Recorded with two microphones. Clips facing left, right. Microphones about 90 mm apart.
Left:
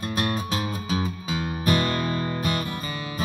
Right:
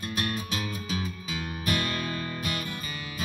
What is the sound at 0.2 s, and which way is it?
Music, 35° left (ahead or behind).